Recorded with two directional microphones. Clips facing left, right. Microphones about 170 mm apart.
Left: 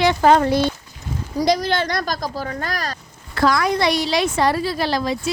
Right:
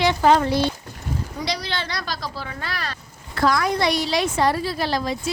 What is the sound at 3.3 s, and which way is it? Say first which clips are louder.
A woman's voice: left 2 dB; 90° left.